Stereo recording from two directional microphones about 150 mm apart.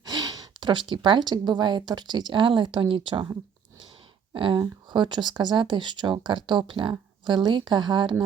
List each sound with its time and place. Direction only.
0.0 s speech: 25° right (ahead or behind)
4.4 s speech: 35° right (ahead or behind)